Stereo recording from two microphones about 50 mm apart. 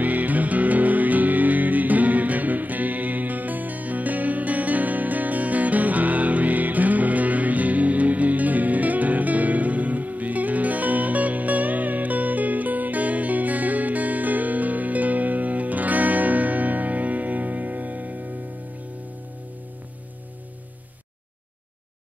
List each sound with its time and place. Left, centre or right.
0.0 s music: right